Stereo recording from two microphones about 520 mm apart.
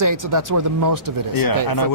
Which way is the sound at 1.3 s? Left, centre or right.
Left.